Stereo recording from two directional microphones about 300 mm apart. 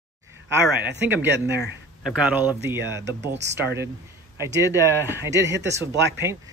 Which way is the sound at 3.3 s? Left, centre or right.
Right.